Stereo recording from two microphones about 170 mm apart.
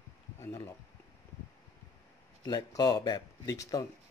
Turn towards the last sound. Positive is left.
turn(degrees=20)  # may be behind; listen again after turning